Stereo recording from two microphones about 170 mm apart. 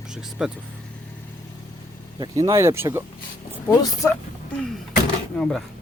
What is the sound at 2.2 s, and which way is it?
Speech, 25° right (ahead or behind).